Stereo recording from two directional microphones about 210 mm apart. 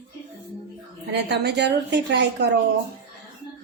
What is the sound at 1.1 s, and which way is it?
A woman's voice, 55° right (ahead or behind).